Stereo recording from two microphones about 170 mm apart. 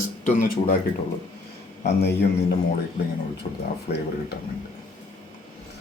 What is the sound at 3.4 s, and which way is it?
Speech, 45° left (ahead or behind).